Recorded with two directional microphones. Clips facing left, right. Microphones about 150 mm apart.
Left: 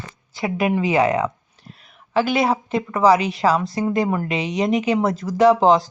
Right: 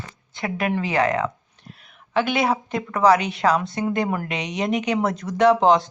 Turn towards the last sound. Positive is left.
turn(degrees=0)  # may be behind; listen again after turning